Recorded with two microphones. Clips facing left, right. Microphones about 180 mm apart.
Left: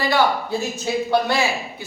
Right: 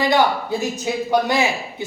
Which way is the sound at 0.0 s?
20° right (ahead or behind).